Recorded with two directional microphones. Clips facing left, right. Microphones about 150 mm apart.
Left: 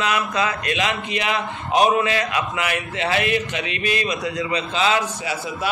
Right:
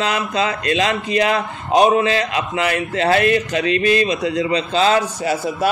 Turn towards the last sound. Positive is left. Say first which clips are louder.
# right 7 dB
turn(degrees=-45)  # may be behind; listen again after turning